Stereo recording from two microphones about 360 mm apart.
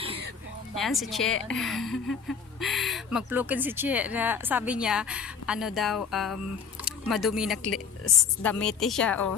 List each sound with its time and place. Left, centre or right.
0.8 s a woman's voice: centre